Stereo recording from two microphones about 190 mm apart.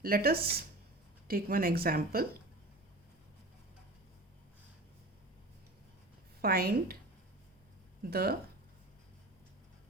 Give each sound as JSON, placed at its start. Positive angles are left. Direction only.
{"t": 0.0, "sound": "speech", "side_deg": -50}
{"t": 6.4, "sound": "speech", "side_deg": -50}
{"t": 8.0, "sound": "speech", "side_deg": -55}